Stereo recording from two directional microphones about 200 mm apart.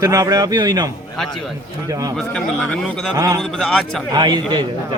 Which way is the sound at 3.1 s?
15° right (ahead or behind).